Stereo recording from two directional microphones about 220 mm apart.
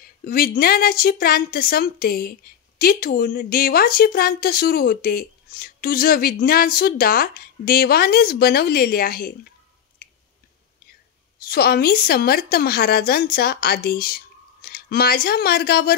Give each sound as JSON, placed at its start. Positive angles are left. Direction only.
{"t": 0.2, "sound": "speech", "side_deg": 40}
{"t": 11.4, "sound": "speech", "side_deg": 45}